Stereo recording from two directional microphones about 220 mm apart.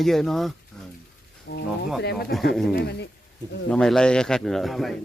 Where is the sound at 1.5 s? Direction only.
55° left (ahead or behind).